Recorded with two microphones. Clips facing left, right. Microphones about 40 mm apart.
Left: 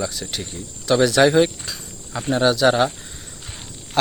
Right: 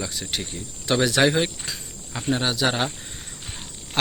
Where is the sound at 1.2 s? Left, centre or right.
Centre.